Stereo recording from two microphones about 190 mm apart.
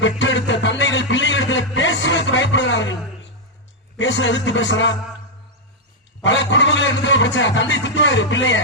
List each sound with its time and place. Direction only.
0.2 s music: 75° left (ahead or behind)
3.9 s speech: 75° left (ahead or behind)
6.2 s speech: 75° left (ahead or behind)